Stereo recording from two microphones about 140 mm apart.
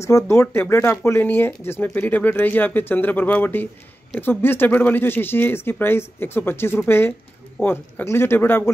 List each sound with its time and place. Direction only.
0.0 s speech: 20° left (ahead or behind)